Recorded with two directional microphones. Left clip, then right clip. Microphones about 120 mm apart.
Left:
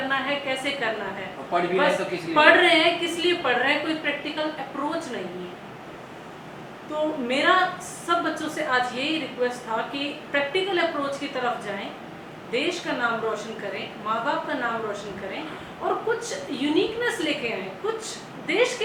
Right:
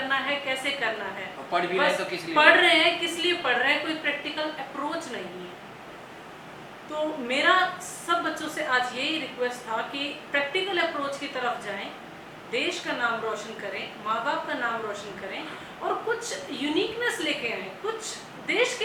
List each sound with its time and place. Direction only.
0.0 s a woman's voice: 15° left (ahead or behind)
6.9 s a woman's voice: 15° left (ahead or behind)